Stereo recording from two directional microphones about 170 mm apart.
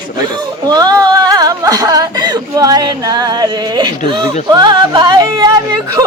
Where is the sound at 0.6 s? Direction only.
20° right (ahead or behind).